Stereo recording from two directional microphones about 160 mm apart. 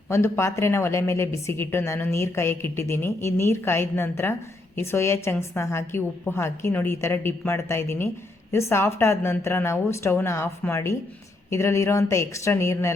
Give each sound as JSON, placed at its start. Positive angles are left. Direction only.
{"t": 0.1, "sound": "a woman's voice", "side_deg": 15}